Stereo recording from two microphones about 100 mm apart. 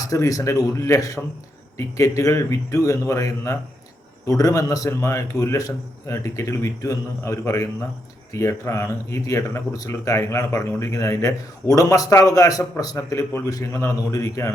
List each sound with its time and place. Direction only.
0.0 s speech: 35° left (ahead or behind)